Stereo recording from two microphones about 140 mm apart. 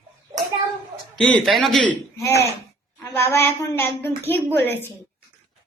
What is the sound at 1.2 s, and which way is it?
Speech, 5° left (ahead or behind).